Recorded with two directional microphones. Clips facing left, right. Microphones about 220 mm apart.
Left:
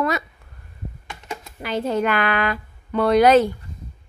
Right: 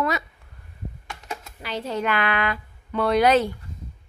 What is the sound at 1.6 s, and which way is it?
A woman's voice, 50° left (ahead or behind).